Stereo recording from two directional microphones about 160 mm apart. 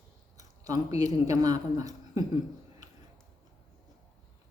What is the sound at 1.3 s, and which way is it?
Speech, 25° right (ahead or behind).